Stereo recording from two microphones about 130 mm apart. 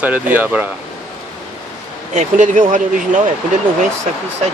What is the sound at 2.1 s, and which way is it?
Speech, 70° right (ahead or behind).